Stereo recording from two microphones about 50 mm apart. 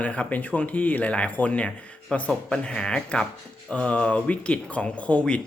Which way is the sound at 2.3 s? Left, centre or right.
Centre.